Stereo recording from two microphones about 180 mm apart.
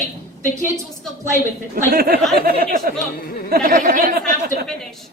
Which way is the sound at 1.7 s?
55° right (ahead or behind).